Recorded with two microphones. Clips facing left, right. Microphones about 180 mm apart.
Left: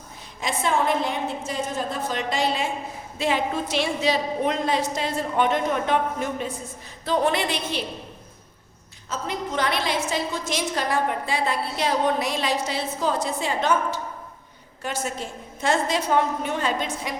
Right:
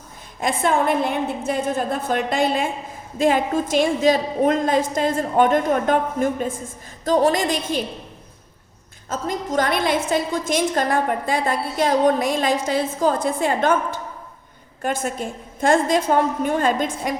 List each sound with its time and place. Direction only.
0.3 s a woman's voice: 55° right (ahead or behind)
9.0 s a woman's voice: 45° right (ahead or behind)